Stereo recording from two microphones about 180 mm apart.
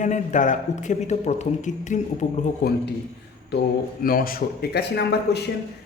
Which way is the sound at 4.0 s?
55° left (ahead or behind).